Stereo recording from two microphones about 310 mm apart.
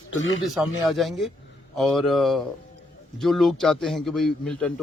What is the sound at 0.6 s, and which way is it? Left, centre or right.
Speech, centre.